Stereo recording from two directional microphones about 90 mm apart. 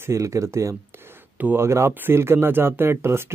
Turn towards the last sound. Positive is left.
turn(degrees=-30)  # may be behind; listen again after turning